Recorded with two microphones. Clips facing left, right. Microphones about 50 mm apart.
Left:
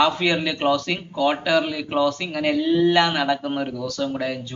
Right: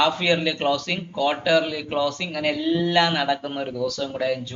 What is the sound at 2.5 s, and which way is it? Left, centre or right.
Speech, centre.